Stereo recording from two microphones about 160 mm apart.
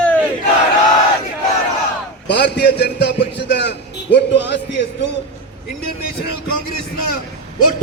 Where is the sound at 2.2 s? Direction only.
90° left.